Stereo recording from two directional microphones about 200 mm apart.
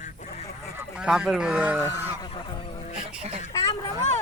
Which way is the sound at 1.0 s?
5° right (ahead or behind).